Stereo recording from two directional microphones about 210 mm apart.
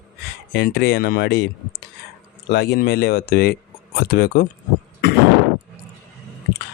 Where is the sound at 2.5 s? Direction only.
50° left (ahead or behind).